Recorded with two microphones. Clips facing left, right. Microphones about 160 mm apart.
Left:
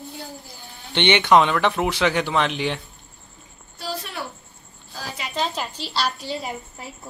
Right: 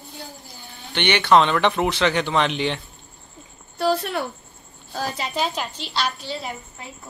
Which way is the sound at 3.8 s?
60° right (ahead or behind).